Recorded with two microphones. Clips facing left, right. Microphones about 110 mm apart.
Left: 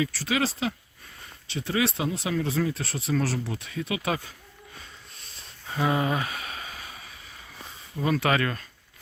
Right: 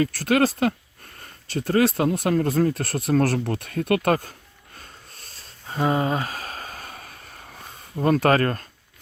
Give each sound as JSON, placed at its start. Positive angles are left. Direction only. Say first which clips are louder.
{"t": 0.0, "sound": "speech", "louder": "right 7 dB", "side_deg": -55}
{"t": 5.6, "sound": "a sound", "louder": "right 3 dB", "side_deg": -30}
{"t": 8.0, "sound": "speech", "louder": "right 6 dB", "side_deg": -45}